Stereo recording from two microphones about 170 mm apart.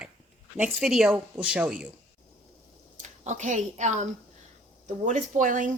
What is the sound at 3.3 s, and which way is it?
Speech, 45° right (ahead or behind).